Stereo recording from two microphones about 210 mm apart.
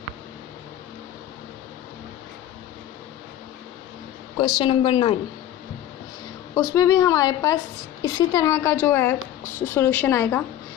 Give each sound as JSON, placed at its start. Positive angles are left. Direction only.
{"t": 4.6, "sound": "a woman's voice", "side_deg": 25}
{"t": 6.5, "sound": "a woman's voice", "side_deg": 15}